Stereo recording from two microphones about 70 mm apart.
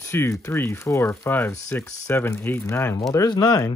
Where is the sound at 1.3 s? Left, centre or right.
Left.